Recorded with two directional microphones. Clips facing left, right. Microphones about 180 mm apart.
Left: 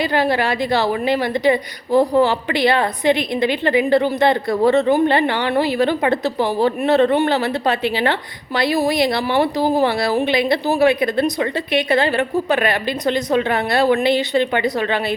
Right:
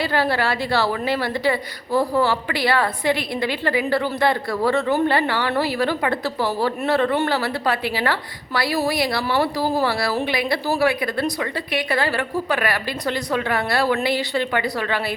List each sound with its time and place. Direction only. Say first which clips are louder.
0.0 s a woman's voice: left 3 dB; 15° left (ahead or behind)